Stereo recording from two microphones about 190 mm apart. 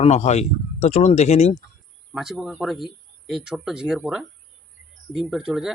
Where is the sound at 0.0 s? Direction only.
35° left (ahead or behind).